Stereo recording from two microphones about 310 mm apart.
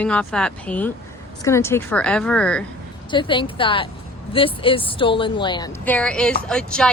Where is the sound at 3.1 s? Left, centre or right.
Centre.